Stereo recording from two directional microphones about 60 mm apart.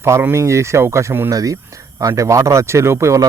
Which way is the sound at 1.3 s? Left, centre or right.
Right.